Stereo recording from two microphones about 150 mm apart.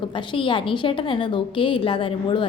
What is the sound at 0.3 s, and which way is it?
A woman's voice, 35° left (ahead or behind).